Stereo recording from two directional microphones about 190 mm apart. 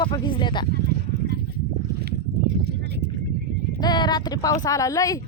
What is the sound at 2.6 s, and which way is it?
Clip-clop, 55° right (ahead or behind).